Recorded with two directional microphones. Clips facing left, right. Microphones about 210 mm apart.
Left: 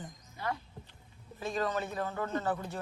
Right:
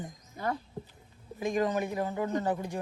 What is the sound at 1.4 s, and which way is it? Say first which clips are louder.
A woman's voice: right 5 dB; 15° right (ahead or behind).